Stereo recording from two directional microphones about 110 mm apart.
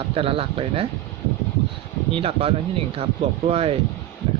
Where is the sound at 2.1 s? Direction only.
60° right (ahead or behind).